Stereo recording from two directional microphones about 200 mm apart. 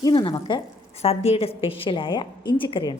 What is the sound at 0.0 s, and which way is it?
A woman's voice, 20° left (ahead or behind).